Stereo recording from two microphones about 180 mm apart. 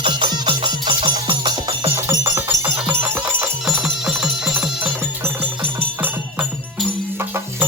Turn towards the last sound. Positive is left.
turn(degrees=-10)  # may be behind; listen again after turning